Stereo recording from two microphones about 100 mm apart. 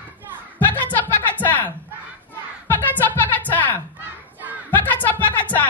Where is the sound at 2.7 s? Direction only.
20° left (ahead or behind).